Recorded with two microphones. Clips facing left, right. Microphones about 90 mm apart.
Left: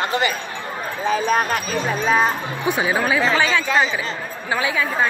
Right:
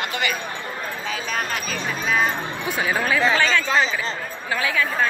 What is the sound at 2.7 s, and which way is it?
A woman's voice, 20° left (ahead or behind).